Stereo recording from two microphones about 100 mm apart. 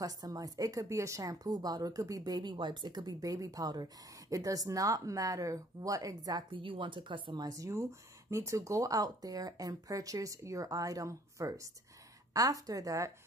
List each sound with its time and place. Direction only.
0.0 s a woman's voice: 40° right (ahead or behind)
6.5 s speech: 60° right (ahead or behind)
7.4 s a woman's voice: 35° right (ahead or behind)